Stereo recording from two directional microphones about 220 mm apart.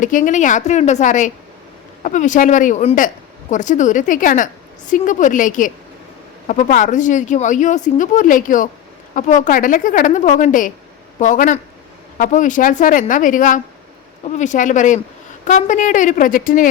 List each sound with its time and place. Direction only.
0.0 s speech: 35° left (ahead or behind)